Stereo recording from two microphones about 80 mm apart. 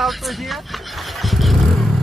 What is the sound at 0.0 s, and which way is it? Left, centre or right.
Vehicle, centre.